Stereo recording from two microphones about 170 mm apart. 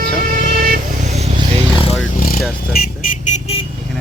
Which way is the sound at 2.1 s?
60° left (ahead or behind).